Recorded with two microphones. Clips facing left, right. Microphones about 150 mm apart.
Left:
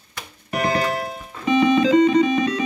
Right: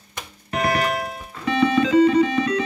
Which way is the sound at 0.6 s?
30° left (ahead or behind).